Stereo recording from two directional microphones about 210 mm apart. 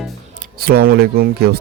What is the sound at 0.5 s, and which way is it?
Speech, 45° right (ahead or behind).